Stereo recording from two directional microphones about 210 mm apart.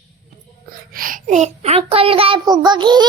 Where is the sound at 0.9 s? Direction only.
40° right (ahead or behind); by 3.1 s 20° right (ahead or behind).